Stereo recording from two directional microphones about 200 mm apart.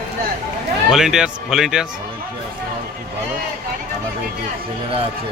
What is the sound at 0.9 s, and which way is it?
Speech, centre (ahead or behind).